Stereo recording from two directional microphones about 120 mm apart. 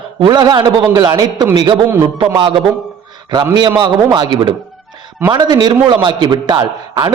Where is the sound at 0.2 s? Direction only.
35° right (ahead or behind).